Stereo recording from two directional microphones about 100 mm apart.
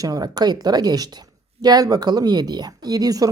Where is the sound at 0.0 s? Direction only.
40° right (ahead or behind).